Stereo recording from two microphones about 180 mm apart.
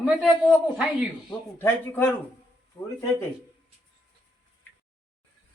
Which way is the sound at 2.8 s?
30° left (ahead or behind).